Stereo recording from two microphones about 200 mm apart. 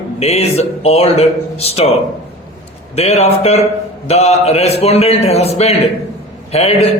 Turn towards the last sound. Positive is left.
turn(degrees=30)  # may be behind; listen again after turning